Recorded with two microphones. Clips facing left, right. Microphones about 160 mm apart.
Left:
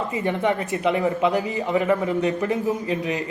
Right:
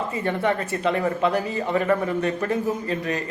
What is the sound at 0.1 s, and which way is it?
Speech, 15° left (ahead or behind).